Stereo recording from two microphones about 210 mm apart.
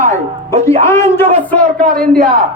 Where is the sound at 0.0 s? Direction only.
35° right (ahead or behind).